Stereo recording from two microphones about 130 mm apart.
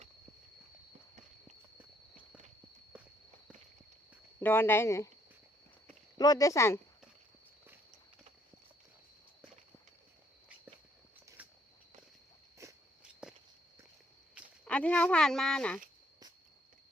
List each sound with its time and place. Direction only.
4.4 s speech: 15° left (ahead or behind)
6.1 s speech: 30° left (ahead or behind)
11.4 s walk: 10° right (ahead or behind)
12.6 s walk: 25° right (ahead or behind)
13.2 s walk: 5° right (ahead or behind)
14.6 s speech: 10° left (ahead or behind)